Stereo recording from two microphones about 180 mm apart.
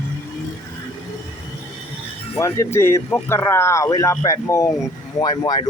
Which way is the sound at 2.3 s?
15° left (ahead or behind).